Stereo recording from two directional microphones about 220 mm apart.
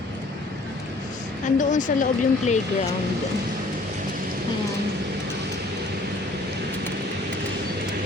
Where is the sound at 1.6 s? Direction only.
35° left (ahead or behind).